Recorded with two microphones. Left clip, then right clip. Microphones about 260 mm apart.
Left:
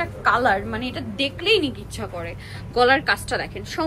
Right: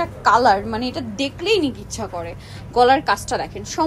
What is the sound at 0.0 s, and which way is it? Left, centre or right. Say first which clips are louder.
A woman's voice: right 4 dB; centre.